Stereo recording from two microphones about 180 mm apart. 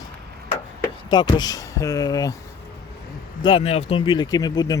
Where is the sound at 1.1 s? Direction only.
25° left (ahead or behind).